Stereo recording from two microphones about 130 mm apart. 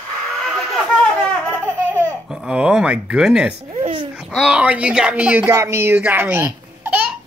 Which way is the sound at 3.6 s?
65° right (ahead or behind).